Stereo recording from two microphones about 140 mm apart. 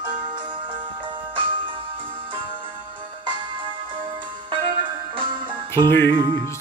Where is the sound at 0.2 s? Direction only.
30° right (ahead or behind).